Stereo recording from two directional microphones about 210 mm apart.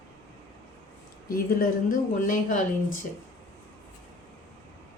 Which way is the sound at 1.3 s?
40° left (ahead or behind).